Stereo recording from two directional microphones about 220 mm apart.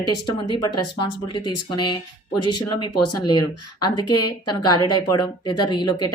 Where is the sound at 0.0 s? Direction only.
20° left (ahead or behind).